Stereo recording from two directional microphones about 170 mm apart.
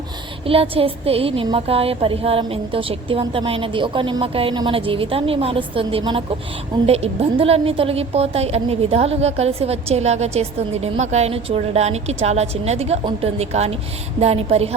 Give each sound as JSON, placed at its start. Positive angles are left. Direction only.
{"t": 0.4, "sound": "a woman's voice", "side_deg": -35}